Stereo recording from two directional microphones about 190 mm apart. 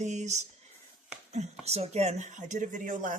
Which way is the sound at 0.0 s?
40° right (ahead or behind).